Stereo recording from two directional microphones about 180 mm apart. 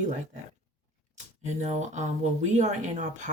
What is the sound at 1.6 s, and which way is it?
Speech, 40° right (ahead or behind).